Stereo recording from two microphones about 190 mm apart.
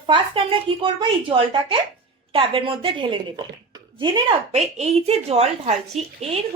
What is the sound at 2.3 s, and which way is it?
A woman's voice, 30° right (ahead or behind).